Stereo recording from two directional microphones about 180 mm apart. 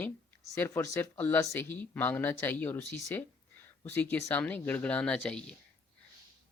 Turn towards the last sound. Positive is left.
turn(degrees=5)  # may be behind; listen again after turning